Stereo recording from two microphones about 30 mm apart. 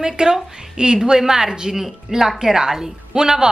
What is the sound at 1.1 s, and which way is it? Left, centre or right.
Speech, centre.